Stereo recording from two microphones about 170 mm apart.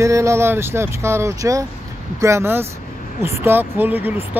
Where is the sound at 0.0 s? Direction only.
15° right (ahead or behind).